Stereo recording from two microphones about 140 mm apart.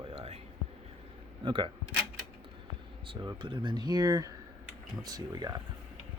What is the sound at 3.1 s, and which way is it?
Speech, 35° right (ahead or behind).